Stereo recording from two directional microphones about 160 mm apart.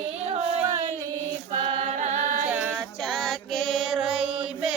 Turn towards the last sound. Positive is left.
turn(degrees=0)  # may be behind; listen again after turning